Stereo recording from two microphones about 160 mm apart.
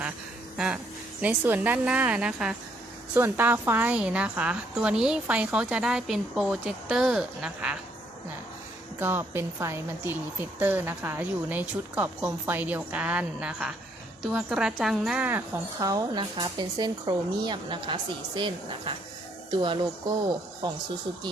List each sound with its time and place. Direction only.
0.5 s a sound: 5° right (ahead or behind)
1.2 s a woman's voice: 10° right (ahead or behind)
9.0 s a woman's voice: 15° right (ahead or behind); by 19.8 s 30° right (ahead or behind)